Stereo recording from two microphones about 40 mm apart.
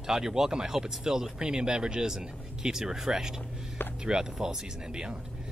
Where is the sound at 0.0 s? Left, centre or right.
Centre.